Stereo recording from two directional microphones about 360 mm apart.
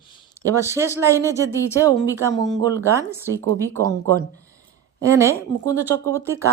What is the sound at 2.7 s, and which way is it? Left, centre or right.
Speech, centre.